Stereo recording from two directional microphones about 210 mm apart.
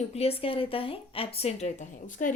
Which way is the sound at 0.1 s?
30° left (ahead or behind).